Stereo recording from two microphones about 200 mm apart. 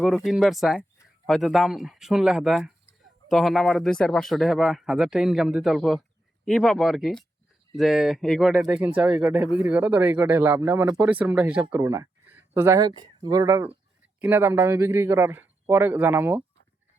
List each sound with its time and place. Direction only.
0.3 s speech: centre (ahead or behind)